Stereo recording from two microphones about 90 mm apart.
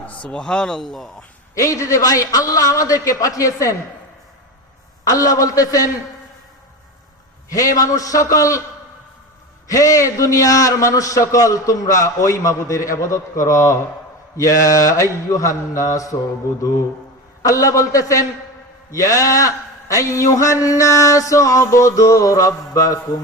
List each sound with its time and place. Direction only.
0.3 s speech: 10° left (ahead or behind)
1.5 s a man's voice: 40° left (ahead or behind)
5.0 s a man's voice: 40° left (ahead or behind)
7.5 s a man's voice: 40° left (ahead or behind)
9.6 s a man's voice: 40° left (ahead or behind)
17.4 s a man's voice: 40° left (ahead or behind)